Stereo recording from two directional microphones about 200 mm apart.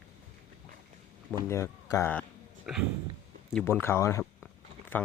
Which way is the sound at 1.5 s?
15° left (ahead or behind).